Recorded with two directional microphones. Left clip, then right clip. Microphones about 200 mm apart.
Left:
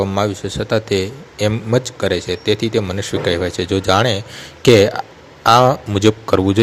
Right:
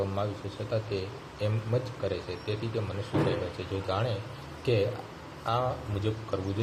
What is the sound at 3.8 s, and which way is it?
Speech, 55° left (ahead or behind).